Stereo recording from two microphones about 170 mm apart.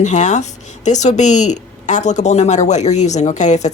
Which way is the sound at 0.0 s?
45° left (ahead or behind).